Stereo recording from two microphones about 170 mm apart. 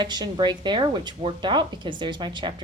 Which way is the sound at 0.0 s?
25° right (ahead or behind).